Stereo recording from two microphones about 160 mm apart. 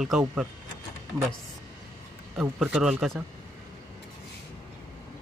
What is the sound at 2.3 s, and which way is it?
Speech, centre (ahead or behind).